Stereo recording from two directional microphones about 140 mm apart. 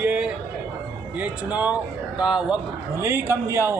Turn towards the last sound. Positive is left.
turn(degrees=-20)  # may be behind; listen again after turning